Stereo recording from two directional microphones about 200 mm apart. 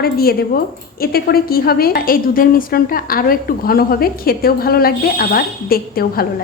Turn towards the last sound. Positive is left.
turn(degrees=50)  # may be behind; listen again after turning